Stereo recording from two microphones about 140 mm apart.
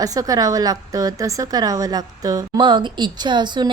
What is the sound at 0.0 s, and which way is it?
A woman's voice, 25° right (ahead or behind).